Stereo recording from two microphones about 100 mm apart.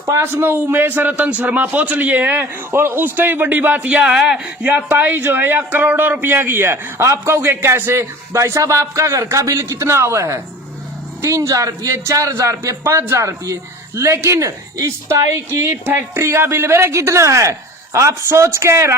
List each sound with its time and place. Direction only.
0.1 s a man's voice: 25° right (ahead or behind); by 4.7 s 5° right (ahead or behind)
4.7 s a man's voice: 20° right (ahead or behind)